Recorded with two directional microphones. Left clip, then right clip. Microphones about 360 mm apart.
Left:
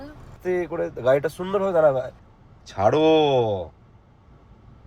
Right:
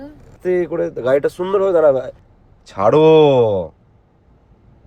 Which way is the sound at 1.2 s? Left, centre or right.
Right.